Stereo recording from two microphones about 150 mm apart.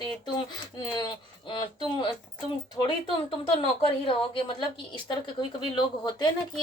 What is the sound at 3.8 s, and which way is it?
Speech, 35° left (ahead or behind).